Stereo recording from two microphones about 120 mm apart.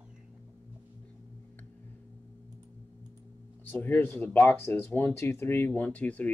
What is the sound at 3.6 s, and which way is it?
Speech, 15° left (ahead or behind).